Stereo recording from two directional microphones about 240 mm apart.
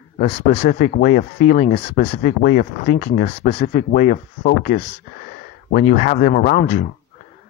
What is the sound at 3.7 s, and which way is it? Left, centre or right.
Speech, left.